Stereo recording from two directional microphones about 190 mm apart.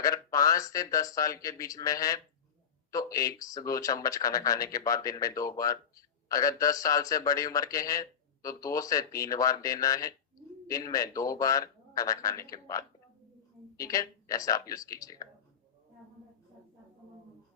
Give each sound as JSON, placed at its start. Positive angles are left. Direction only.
{"t": 0.0, "sound": "a man's voice", "side_deg": 15}